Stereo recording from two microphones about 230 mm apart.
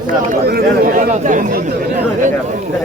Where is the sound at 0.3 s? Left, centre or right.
Right.